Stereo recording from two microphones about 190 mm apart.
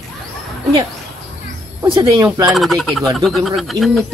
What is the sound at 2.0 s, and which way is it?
Speech, 20° right (ahead or behind).